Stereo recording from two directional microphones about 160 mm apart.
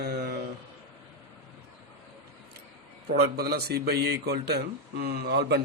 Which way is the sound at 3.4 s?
85° right.